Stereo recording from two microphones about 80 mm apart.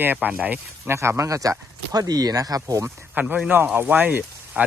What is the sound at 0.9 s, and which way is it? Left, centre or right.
Speech, right.